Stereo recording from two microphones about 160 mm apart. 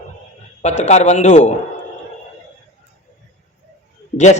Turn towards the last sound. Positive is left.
turn(degrees=45)  # may be behind; listen again after turning